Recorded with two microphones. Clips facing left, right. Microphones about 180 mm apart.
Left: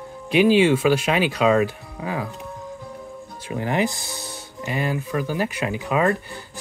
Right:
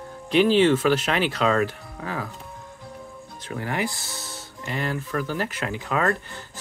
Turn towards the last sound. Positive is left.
turn(degrees=10)  # may be behind; listen again after turning